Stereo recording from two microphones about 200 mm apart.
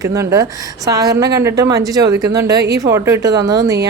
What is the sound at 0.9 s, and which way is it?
Speech, 20° right (ahead or behind).